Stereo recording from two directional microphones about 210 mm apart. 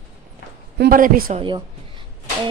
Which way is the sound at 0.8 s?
40° right (ahead or behind).